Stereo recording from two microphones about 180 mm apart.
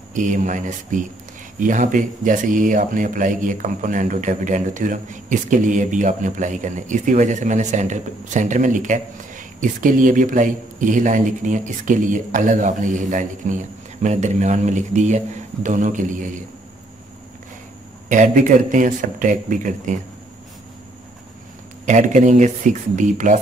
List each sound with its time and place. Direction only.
0.1 s speech: 45° right (ahead or behind)
18.0 s speech: 45° right (ahead or behind)
21.8 s speech: 45° right (ahead or behind)